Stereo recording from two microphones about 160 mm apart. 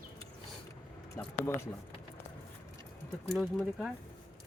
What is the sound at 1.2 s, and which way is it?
Speech, 15° left (ahead or behind).